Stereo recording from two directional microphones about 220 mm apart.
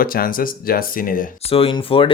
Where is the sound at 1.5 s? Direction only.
25° left (ahead or behind).